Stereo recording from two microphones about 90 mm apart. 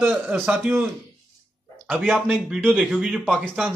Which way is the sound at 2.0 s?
5° right (ahead or behind).